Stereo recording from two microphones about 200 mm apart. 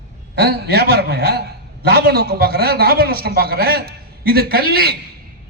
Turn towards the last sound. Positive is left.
turn(degrees=-50)  # may be behind; listen again after turning